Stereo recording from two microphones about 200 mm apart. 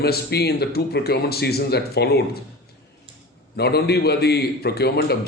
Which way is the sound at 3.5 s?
55° left (ahead or behind).